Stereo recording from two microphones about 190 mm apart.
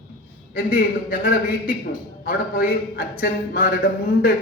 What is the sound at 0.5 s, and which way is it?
A man's voice, 50° left (ahead or behind).